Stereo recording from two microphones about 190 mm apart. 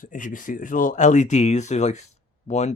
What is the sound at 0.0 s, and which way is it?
Speech, 45° left (ahead or behind).